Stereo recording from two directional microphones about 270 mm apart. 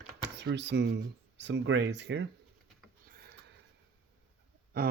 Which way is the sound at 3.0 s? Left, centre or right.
Right.